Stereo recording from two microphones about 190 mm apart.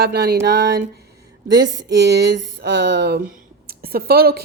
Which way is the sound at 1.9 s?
65° right (ahead or behind).